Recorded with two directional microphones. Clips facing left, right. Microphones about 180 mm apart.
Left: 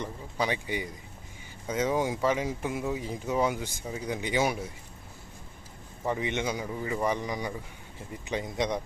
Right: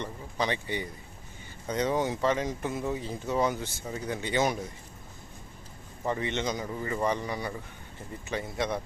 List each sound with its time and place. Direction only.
0.0 s speech: 10° left (ahead or behind)
6.1 s speech: 15° left (ahead or behind)